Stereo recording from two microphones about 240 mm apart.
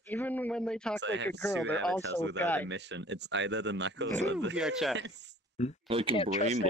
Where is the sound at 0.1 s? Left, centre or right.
Centre.